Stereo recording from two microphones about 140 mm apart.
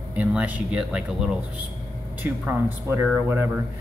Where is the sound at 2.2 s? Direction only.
15° right (ahead or behind).